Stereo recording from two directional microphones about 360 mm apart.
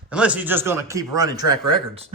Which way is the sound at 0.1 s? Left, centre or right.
Centre.